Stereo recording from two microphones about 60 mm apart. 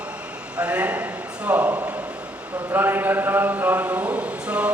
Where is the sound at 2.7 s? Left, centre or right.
Right.